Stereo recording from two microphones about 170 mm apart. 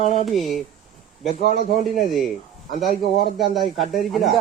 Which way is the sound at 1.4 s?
55° right (ahead or behind).